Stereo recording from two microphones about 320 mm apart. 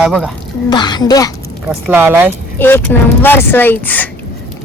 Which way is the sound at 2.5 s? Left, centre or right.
Centre.